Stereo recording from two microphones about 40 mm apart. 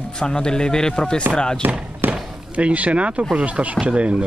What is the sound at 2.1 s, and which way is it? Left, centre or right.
Chop, right.